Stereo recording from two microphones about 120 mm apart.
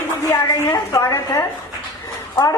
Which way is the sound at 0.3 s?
25° left (ahead or behind).